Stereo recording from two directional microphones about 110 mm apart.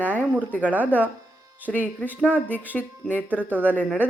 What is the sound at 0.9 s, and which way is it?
Speech, 15° left (ahead or behind).